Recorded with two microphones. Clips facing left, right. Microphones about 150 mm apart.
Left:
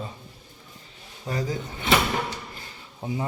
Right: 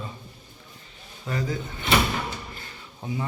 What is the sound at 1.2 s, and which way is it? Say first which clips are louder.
Speech: left 1 dB; 20° left (ahead or behind).